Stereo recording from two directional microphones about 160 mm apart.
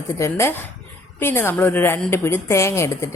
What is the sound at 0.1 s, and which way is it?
A woman's voice, 20° left (ahead or behind).